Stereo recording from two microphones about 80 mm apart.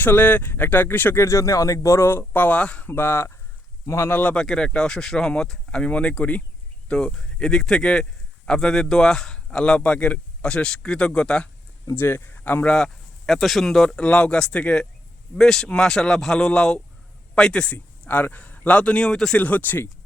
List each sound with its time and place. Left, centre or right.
0.0 s speech: left
1.2 s speech: left; by 2.9 s centre
2.9 s speech: left
4.2 s speech: centre
11.9 s speech: left
12.7 s speech: centre
19.4 s speech: centre